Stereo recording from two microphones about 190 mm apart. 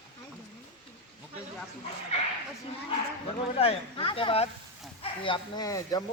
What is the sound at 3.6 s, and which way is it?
Speech, 30° left (ahead or behind).